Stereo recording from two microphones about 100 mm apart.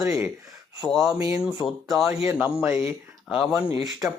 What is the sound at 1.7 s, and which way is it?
Speech, centre (ahead or behind).